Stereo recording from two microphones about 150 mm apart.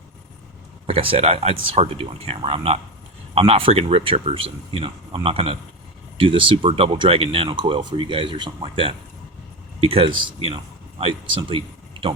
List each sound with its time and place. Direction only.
0.9 s speech: 40° right (ahead or behind)